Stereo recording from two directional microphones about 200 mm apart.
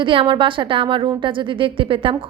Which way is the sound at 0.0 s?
25° right (ahead or behind).